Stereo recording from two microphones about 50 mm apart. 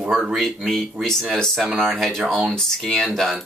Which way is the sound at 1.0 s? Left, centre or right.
Right.